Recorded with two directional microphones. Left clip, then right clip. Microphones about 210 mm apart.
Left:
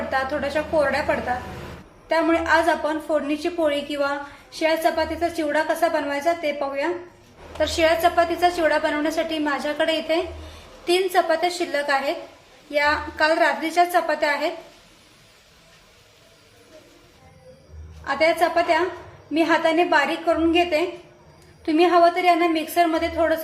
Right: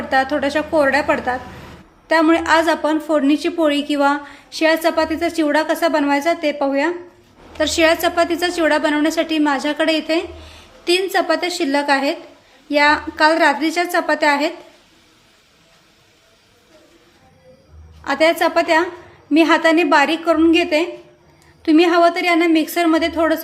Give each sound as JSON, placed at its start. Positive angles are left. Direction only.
{"t": 0.1, "sound": "a woman's voice", "side_deg": -50}
{"t": 18.0, "sound": "a woman's voice", "side_deg": -55}